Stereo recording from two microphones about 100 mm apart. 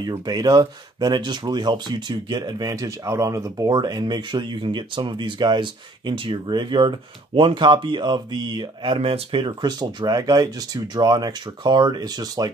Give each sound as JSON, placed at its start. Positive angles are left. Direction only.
{"t": 0.2, "sound": "speech", "side_deg": -40}
{"t": 8.9, "sound": "speech", "side_deg": -75}
{"t": 9.5, "sound": "speech", "side_deg": -45}